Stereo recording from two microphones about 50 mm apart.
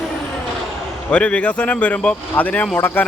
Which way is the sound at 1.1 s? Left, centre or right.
Left.